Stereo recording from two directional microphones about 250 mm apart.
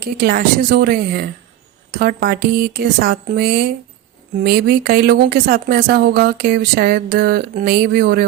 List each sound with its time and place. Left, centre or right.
0.0 s speech: right